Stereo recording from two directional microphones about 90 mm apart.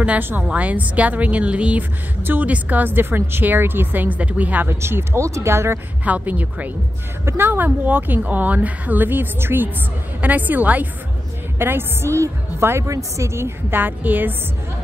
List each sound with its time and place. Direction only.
0.0 s a woman's voice: 20° right (ahead or behind)
6.0 s a woman's voice: 15° right (ahead or behind)